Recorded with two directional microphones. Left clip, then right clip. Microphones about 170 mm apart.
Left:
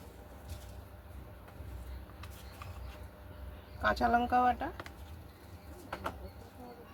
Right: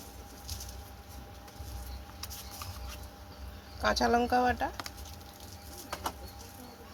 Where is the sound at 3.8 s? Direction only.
25° right (ahead or behind).